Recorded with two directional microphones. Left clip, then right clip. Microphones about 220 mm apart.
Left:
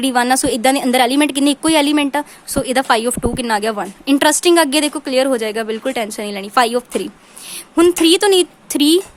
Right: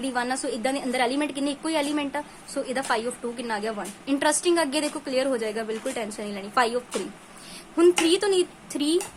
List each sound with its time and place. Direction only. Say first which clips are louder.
0.0 s a woman's voice: left 12 dB; 45° left (ahead or behind)